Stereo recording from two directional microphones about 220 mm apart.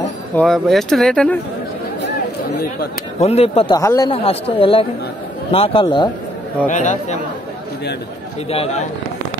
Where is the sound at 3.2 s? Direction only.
30° left (ahead or behind).